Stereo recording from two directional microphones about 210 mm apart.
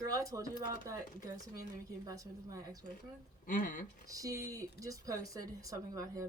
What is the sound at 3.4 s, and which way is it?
Speech, 40° left (ahead or behind).